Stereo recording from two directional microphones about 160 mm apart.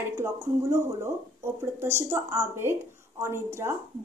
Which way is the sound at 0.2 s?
15° right (ahead or behind).